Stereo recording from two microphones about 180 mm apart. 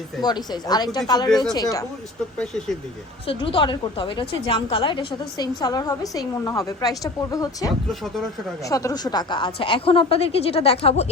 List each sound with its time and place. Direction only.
0.2 s a woman's voice: 25° left (ahead or behind)
2.4 s speech: 5° left (ahead or behind)
3.2 s a woman's voice: 30° left (ahead or behind)